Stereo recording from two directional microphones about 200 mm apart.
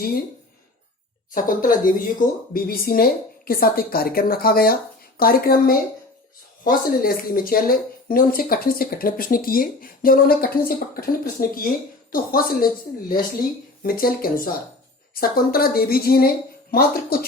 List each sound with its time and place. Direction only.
1.3 s speech: 40° left (ahead or behind)